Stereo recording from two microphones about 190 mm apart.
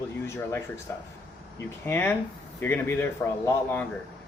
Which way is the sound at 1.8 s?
10° left (ahead or behind).